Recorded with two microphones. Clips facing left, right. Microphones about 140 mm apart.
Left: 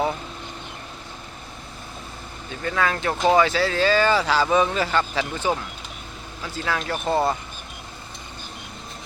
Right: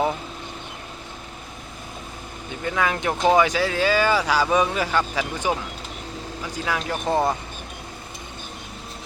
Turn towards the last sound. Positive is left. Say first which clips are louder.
# even
turn(degrees=-15)  # may be behind; listen again after turning